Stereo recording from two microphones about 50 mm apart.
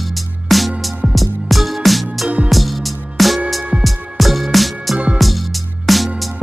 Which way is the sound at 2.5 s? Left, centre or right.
Centre.